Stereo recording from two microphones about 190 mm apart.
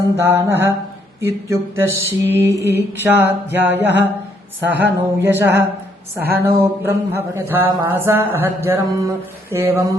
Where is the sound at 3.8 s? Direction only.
65° right (ahead or behind).